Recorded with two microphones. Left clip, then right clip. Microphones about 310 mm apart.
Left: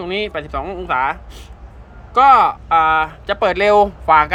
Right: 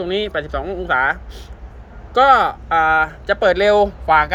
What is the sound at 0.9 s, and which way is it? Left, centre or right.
Speech, left.